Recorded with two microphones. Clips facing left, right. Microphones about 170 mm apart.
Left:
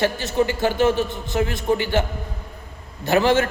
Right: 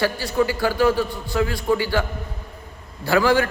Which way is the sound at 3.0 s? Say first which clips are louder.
Even; 20° left (ahead or behind).